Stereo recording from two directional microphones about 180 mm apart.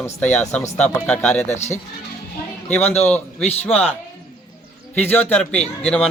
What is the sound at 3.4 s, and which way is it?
Speech, 35° left (ahead or behind).